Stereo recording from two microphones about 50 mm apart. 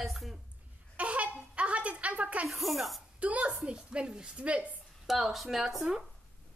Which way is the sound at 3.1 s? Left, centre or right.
Right.